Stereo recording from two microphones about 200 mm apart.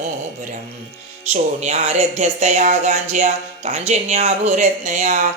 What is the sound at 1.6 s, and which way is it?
Speech, 35° right (ahead or behind).